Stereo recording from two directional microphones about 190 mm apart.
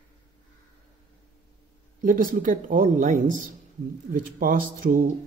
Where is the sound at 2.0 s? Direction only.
45° right (ahead or behind).